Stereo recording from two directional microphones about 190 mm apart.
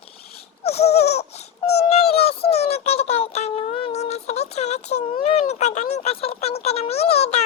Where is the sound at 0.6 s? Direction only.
35° left (ahead or behind).